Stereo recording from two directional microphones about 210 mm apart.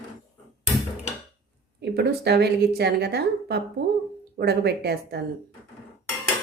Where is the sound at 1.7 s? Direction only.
50° right (ahead or behind).